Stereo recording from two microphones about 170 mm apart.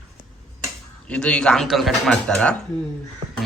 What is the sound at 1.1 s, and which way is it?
A man's voice, 5° left (ahead or behind).